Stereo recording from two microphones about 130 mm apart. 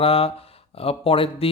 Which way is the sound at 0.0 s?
45° left (ahead or behind).